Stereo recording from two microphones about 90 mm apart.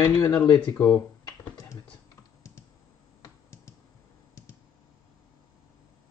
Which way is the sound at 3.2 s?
35° left (ahead or behind).